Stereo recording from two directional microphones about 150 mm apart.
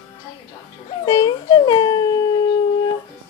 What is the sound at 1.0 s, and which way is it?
Dog, 25° left (ahead or behind).